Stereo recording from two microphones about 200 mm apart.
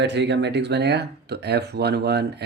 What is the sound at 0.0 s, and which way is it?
Speech, 60° right (ahead or behind).